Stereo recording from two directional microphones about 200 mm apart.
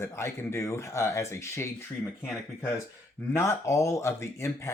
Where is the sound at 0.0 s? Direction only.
15° left (ahead or behind).